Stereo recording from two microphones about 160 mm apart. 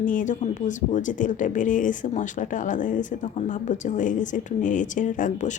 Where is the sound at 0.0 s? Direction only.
55° left (ahead or behind).